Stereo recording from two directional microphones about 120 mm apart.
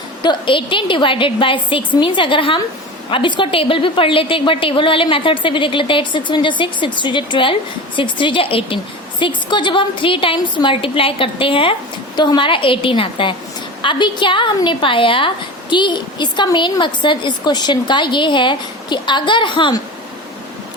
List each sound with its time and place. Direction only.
0.2 s a woman's voice: 40° left (ahead or behind)